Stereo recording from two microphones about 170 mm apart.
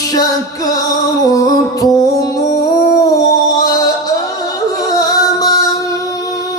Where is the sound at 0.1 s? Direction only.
20° left (ahead or behind).